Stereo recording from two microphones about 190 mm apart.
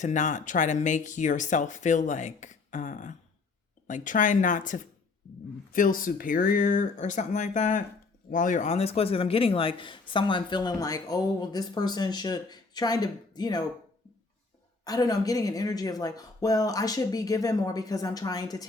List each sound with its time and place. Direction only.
0.0 s speech: 40° left (ahead or behind); by 13.7 s 20° left (ahead or behind)
14.8 s speech: 20° left (ahead or behind)